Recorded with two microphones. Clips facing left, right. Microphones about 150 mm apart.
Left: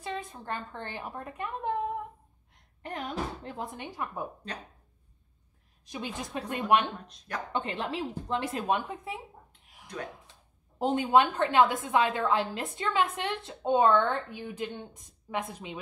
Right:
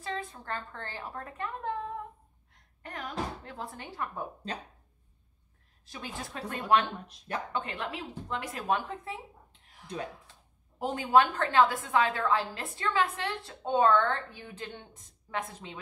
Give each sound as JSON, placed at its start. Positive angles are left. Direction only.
{"t": 0.0, "sound": "a woman's voice", "side_deg": 20}
{"t": 5.9, "sound": "a woman's voice", "side_deg": 15}
{"t": 10.8, "sound": "a woman's voice", "side_deg": 20}